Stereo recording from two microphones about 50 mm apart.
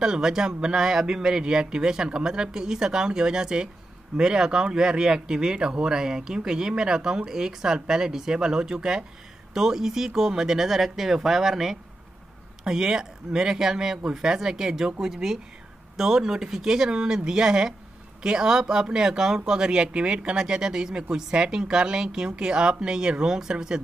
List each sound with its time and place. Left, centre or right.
0.0 s speech: centre